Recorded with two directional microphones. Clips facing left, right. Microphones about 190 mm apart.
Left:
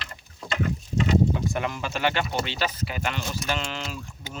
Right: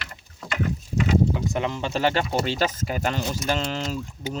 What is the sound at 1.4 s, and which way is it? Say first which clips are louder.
Speech: right 2 dB; 20° right (ahead or behind).